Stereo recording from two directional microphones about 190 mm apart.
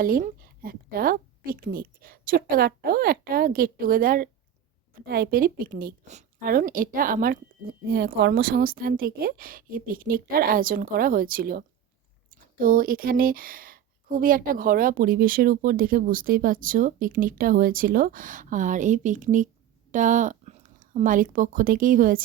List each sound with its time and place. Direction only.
0.0 s speech: 50° right (ahead or behind)